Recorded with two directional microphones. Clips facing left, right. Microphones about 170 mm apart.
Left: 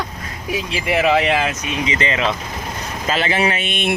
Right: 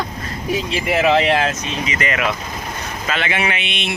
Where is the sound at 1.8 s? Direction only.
25° left (ahead or behind); by 3.9 s 50° left (ahead or behind).